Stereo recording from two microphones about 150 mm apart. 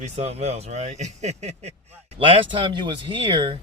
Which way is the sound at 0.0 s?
45° right (ahead or behind).